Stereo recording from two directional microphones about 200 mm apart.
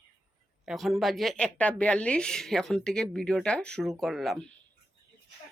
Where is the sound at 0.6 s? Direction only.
Centre (ahead or behind).